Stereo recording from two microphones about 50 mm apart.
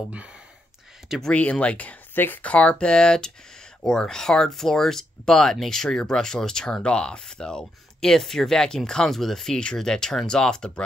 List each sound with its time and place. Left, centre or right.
1.3 s speech: left
2.1 s speech: left
2.4 s speech: left